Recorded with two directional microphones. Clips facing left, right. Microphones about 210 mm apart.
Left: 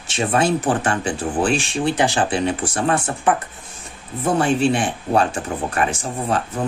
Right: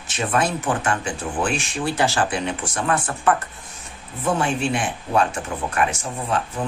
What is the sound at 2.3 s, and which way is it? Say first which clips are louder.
Speech: left 5 dB; 35° left (ahead or behind).